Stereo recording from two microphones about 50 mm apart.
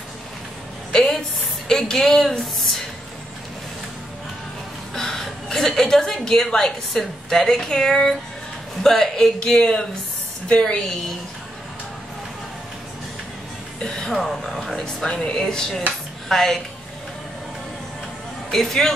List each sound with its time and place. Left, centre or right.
1.7 s a woman's voice: centre
4.9 s a woman's voice: centre
13.7 s a woman's voice: centre
18.5 s a woman's voice: centre